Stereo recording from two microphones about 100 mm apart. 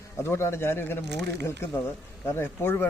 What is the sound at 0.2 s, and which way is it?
Speech, 25° left (ahead or behind).